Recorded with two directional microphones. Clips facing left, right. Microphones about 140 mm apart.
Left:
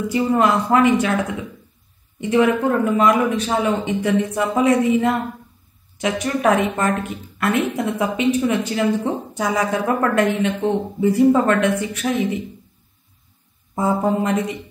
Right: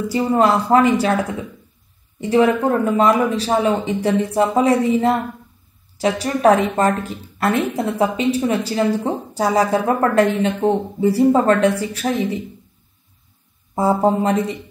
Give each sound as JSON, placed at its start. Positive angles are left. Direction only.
{"t": 0.1, "sound": "speech", "side_deg": -35}
{"t": 2.1, "sound": "speech", "side_deg": -35}
{"t": 13.7, "sound": "speech", "side_deg": -35}